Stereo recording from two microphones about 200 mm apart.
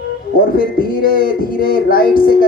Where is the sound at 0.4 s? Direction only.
45° left (ahead or behind).